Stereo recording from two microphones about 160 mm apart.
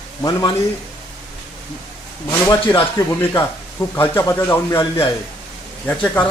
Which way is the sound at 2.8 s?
20° left (ahead or behind).